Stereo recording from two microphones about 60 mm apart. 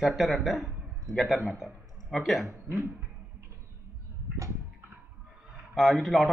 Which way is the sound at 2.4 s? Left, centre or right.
Right.